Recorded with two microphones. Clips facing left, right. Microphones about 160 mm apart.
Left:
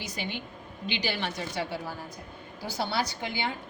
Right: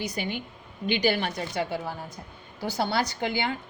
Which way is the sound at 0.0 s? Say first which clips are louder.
Right 5 dB; 50° right (ahead or behind).